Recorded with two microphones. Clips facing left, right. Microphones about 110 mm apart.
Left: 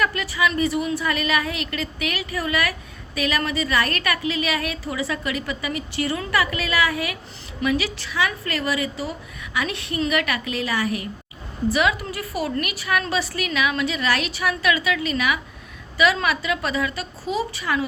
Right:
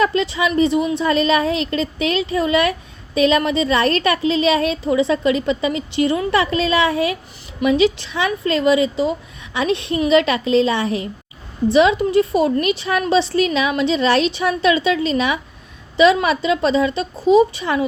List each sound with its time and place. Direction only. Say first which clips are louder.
0.0 s a woman's voice: right 5 dB; 25° right (ahead or behind)